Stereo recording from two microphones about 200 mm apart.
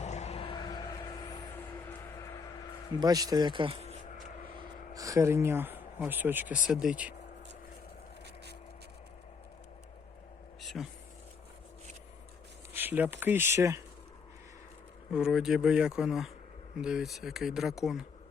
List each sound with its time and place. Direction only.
0.0 s vehicle: 35° left (ahead or behind)
3.0 s a man's voice: 20° right (ahead or behind)
4.4 s a sound: 45° left (ahead or behind)
4.9 s speech: 15° right (ahead or behind)
10.6 s a sound: centre (ahead or behind)
12.7 s speech: 10° right (ahead or behind)
15.1 s speech: 5° right (ahead or behind)